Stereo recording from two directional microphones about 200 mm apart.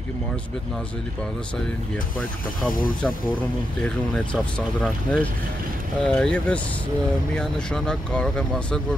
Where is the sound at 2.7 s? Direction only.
45° left (ahead or behind).